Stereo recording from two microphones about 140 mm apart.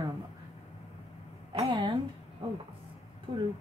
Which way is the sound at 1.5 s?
40° right (ahead or behind).